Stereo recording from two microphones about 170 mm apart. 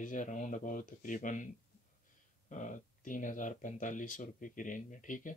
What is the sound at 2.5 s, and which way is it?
Speech, 50° left (ahead or behind).